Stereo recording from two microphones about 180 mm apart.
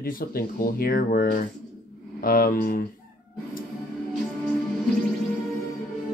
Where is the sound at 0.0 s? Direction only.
55° left (ahead or behind).